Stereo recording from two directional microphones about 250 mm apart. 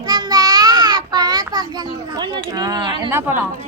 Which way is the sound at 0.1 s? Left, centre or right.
Centre.